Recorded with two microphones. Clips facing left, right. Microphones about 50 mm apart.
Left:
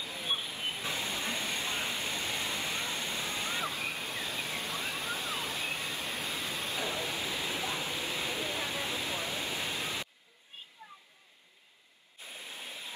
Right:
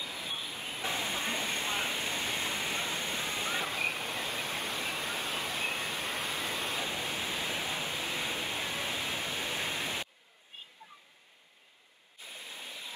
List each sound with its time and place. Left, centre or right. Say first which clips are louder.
0.2 s train: left 8 dB; left
0.7 s waterfall: right 5 dB; right
12.3 s waterfall: even; centre
12.6 s a sound: even; centre